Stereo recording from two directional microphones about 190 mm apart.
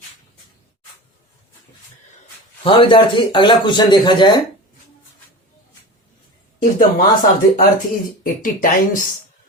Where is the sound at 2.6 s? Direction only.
25° left (ahead or behind).